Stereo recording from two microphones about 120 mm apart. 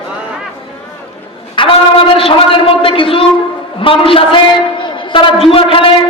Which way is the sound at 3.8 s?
50° left (ahead or behind).